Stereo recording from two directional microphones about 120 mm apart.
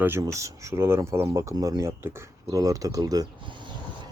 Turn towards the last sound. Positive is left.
turn(degrees=-35)  # may be behind; listen again after turning